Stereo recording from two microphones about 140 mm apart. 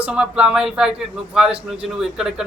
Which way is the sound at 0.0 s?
5° right (ahead or behind).